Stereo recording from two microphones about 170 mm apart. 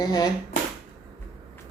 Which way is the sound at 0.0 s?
20° left (ahead or behind).